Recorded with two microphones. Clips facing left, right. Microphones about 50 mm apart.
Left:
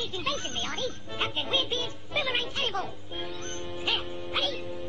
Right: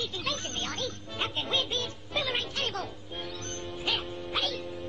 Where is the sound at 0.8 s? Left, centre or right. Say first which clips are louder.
Left 2 dB; centre.